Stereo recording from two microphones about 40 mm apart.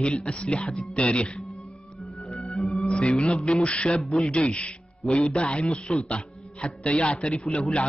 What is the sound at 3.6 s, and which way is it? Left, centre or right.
Speech, left.